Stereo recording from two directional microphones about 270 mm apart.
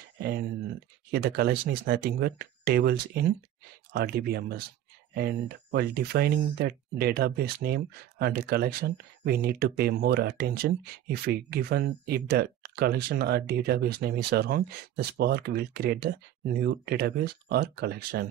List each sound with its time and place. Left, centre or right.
0.2 s speech: right